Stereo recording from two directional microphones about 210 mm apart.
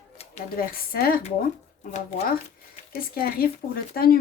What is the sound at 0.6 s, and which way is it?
Speech, 45° left (ahead or behind).